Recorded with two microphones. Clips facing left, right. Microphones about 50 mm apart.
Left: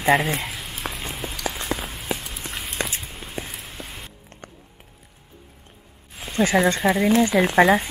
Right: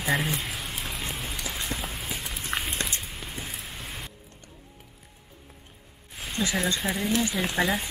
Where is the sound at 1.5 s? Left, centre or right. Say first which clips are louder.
Left 9 dB; left.